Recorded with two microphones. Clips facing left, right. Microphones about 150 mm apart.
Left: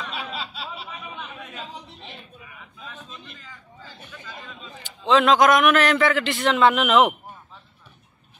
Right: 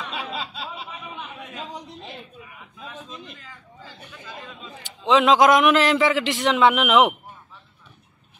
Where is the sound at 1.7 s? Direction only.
40° right (ahead or behind).